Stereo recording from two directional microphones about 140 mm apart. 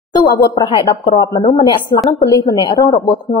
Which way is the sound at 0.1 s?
30° left (ahead or behind).